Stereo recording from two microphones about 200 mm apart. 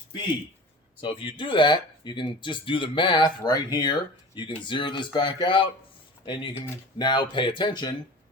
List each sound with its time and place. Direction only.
1.0 s speech: 25° left (ahead or behind)